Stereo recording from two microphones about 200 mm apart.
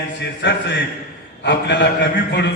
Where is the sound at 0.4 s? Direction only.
60° left (ahead or behind).